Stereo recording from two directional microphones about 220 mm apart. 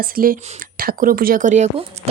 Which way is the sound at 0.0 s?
40° right (ahead or behind).